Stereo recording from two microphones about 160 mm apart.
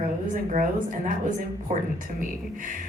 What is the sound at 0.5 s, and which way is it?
Speech, 55° right (ahead or behind).